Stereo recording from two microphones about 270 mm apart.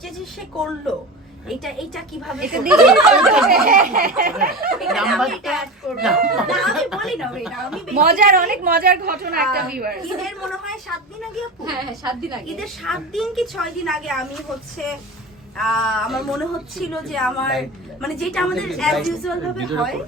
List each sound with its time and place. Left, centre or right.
1.5 s speech: centre
3.5 s a woman's voice: right
4.8 s speech: centre
8.0 s a woman's voice: right
10.2 s speech: centre